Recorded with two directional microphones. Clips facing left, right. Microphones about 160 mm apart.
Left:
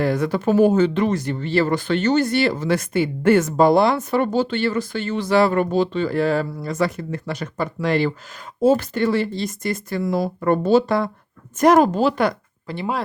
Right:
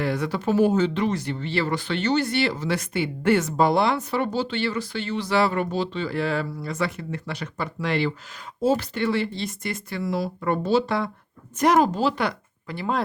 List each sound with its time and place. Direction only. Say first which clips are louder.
0.0 s speech: left 5 dB; 45° left (ahead or behind)
12.6 s speech: left 4 dB; 20° left (ahead or behind)